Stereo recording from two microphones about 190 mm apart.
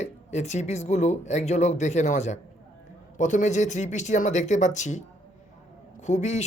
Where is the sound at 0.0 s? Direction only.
35° left (ahead or behind).